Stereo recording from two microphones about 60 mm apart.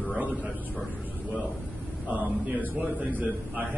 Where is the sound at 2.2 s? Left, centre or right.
Right.